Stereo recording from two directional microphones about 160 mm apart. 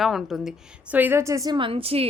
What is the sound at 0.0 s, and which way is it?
A woman's voice, centre (ahead or behind).